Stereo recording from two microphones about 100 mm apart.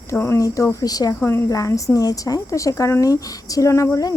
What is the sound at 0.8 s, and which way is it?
Speech, 40° left (ahead or behind).